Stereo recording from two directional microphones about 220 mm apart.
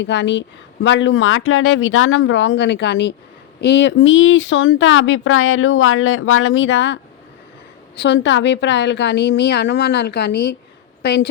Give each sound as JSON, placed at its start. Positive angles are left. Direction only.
{"t": 0.0, "sound": "a woman's voice", "side_deg": 55}